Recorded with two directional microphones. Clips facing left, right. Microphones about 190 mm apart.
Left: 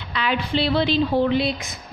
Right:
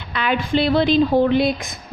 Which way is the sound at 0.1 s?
50° right (ahead or behind).